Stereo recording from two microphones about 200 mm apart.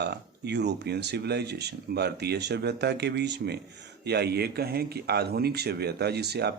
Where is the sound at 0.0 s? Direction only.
55° right (ahead or behind).